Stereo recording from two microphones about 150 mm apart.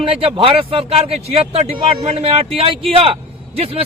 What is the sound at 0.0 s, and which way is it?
A man's voice, 35° right (ahead or behind).